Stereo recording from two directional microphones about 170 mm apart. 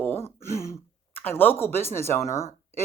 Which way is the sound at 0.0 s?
10° left (ahead or behind).